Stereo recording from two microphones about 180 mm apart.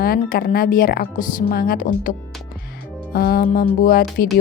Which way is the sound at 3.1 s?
60° left (ahead or behind).